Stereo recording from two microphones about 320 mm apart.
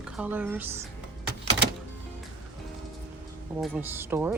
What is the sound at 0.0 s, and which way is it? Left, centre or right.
Speech, centre.